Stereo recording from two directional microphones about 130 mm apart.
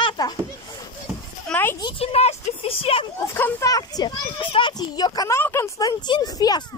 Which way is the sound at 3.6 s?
30° left (ahead or behind).